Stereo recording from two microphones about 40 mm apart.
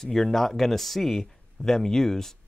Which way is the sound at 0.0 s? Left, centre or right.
Centre.